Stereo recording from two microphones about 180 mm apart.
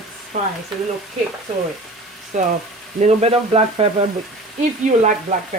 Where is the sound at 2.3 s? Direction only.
40° right (ahead or behind).